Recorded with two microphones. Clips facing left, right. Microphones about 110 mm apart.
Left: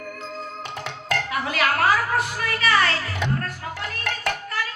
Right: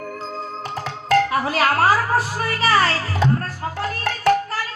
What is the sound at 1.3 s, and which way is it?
A woman's voice, 30° right (ahead or behind).